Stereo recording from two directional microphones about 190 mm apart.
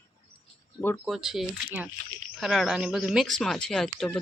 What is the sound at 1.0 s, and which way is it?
Speech, centre (ahead or behind).